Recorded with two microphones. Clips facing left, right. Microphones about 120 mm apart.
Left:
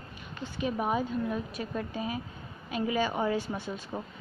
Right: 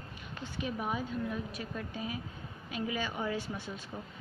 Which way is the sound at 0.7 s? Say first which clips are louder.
Left 6 dB; 45° left (ahead or behind).